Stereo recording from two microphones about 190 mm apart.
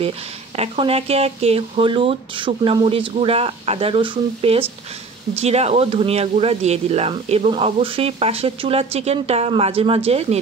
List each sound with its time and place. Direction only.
0.6 s speech: 30° right (ahead or behind)